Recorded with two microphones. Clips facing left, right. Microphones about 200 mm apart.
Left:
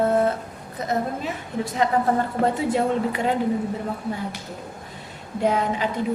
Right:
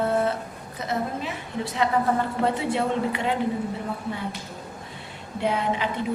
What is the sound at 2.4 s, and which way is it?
Speech, 45° left (ahead or behind).